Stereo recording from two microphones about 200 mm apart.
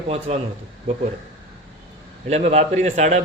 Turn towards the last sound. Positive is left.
turn(degrees=-35)  # may be behind; listen again after turning